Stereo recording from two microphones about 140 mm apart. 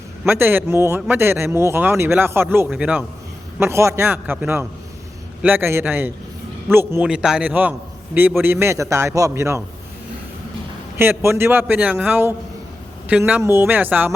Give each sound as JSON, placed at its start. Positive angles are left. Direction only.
{"t": 0.3, "sound": "a man's voice", "side_deg": -15}
{"t": 3.6, "sound": "a man's voice", "side_deg": -20}
{"t": 10.9, "sound": "a man's voice", "side_deg": -15}